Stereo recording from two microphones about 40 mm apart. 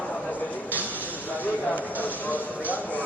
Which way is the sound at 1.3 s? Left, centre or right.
Left.